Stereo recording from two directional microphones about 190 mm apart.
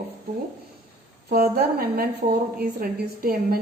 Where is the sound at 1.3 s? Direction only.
55° right (ahead or behind).